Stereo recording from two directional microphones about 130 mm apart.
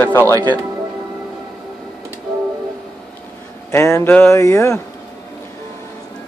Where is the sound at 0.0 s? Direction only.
15° left (ahead or behind).